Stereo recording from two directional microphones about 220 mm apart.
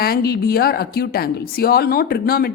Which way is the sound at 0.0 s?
45° left (ahead or behind).